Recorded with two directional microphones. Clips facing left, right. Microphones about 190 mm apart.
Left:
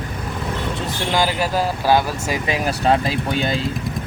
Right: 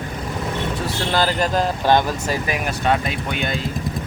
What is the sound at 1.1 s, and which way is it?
Speech, 10° left (ahead or behind).